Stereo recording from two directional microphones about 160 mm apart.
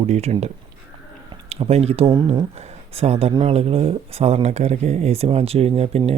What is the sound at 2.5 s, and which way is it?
Speech, 40° right (ahead or behind).